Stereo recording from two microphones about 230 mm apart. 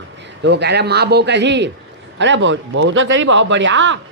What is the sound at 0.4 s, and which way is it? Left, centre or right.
Speech, right.